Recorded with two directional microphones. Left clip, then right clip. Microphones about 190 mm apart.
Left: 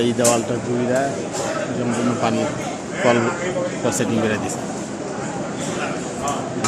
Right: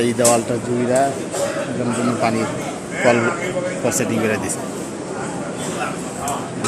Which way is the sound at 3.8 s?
5° left (ahead or behind).